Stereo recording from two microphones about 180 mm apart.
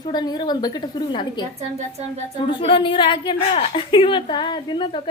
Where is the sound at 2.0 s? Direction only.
40° right (ahead or behind).